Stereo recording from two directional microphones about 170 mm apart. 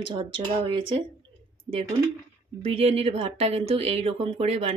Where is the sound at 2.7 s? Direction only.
35° right (ahead or behind).